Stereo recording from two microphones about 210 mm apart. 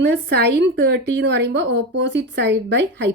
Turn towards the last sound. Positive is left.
turn(degrees=-55)  # may be behind; listen again after turning